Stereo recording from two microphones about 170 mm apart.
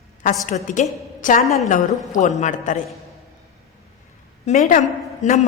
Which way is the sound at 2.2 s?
45° left (ahead or behind).